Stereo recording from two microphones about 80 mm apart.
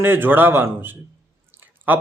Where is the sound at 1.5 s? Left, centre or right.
Right.